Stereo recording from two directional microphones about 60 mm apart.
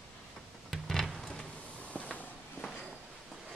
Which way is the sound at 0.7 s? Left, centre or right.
Centre.